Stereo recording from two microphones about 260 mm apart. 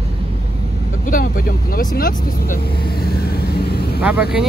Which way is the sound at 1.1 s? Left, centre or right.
Left.